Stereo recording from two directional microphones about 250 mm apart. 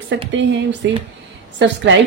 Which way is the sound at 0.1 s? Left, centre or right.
Right.